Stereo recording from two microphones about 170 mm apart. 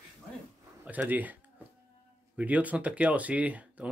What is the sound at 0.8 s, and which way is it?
Speech, 10° right (ahead or behind).